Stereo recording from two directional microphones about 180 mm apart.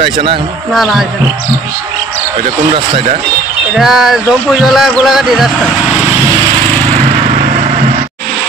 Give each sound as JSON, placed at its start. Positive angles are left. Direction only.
{"t": 2.7, "sound": "speech", "side_deg": -35}
{"t": 3.7, "sound": "speech", "side_deg": 0}